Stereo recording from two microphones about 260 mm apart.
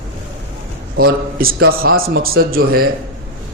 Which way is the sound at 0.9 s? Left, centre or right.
Right.